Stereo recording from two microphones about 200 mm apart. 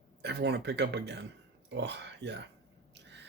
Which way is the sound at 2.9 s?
60° right (ahead or behind).